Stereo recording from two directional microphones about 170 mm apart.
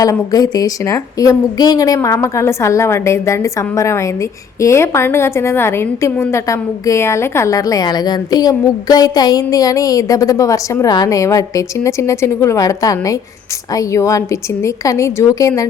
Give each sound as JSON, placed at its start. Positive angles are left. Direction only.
{"t": 0.0, "sound": "a woman's voice", "side_deg": 20}